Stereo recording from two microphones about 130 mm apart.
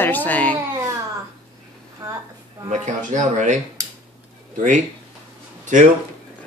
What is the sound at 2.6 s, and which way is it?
Speech, 70° right (ahead or behind).